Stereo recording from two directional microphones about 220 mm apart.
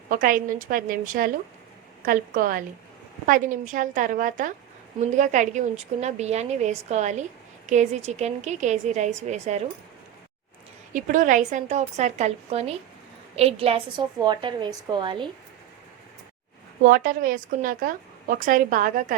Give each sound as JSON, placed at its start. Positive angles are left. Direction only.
{"t": 0.1, "sound": "a woman's voice", "side_deg": -40}
{"t": 10.9, "sound": "a woman's voice", "side_deg": -35}
{"t": 16.8, "sound": "a woman's voice", "side_deg": -40}